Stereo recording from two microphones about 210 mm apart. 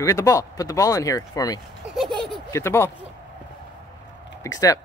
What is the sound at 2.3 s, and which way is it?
Speech, 15° left (ahead or behind).